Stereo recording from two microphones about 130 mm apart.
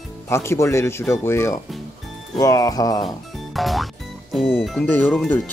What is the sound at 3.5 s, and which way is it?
Speech, centre (ahead or behind).